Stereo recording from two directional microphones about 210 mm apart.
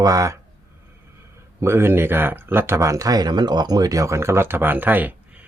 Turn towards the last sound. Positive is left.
turn(degrees=-5)  # may be behind; listen again after turning